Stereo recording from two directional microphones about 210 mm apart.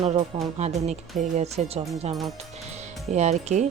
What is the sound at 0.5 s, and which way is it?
Speech, 30° right (ahead or behind).